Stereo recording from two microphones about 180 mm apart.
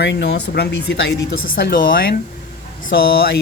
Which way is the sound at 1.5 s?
50° left (ahead or behind).